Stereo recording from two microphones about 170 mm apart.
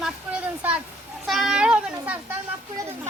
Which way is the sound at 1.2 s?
Centre (ahead or behind).